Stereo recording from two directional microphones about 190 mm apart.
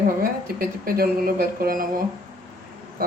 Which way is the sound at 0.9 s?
50° right (ahead or behind).